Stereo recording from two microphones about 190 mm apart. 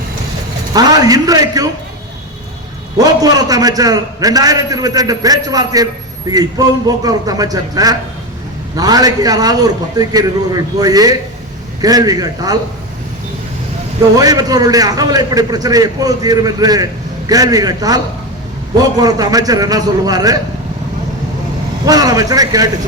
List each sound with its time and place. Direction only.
0.7 s a man's voice: 20° right (ahead or behind)
3.0 s a man's voice: 20° right (ahead or behind)
14.2 s a man's voice: 20° right (ahead or behind)
21.8 s a man's voice: 20° right (ahead or behind)